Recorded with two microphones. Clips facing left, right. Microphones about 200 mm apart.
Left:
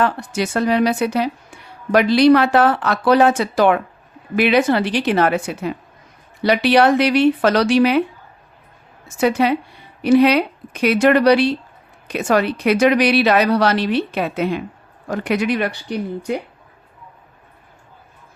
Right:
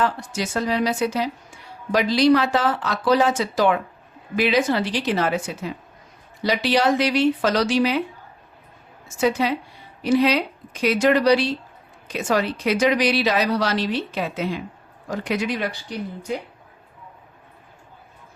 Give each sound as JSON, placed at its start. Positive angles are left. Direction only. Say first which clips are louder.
{"t": 0.0, "sound": "a woman's voice", "louder": "left 4 dB", "side_deg": 65}
{"t": 9.0, "sound": "a woman's voice", "louder": "left 4 dB", "side_deg": 65}